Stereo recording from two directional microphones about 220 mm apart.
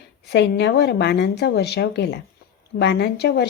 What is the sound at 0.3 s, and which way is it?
Speech, 50° left (ahead or behind).